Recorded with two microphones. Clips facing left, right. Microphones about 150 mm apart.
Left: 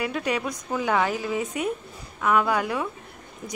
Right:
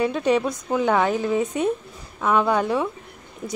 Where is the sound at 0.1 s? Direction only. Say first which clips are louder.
Right 6 dB; 25° right (ahead or behind).